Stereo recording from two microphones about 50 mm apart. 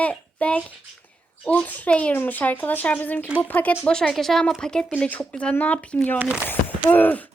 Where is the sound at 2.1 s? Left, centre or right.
Left.